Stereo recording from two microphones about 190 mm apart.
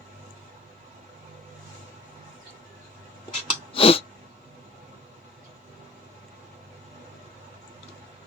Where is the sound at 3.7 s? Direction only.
30° left (ahead or behind).